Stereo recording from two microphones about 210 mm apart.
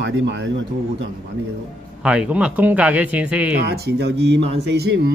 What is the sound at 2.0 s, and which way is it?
Speech, 5° right (ahead or behind).